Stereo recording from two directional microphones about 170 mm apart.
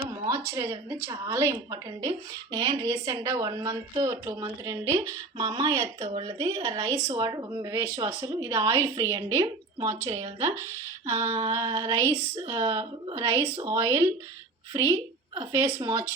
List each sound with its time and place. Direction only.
0.1 s speech: 20° right (ahead or behind)
10.1 s speech: 35° right (ahead or behind)
11.1 s speech: 20° right (ahead or behind)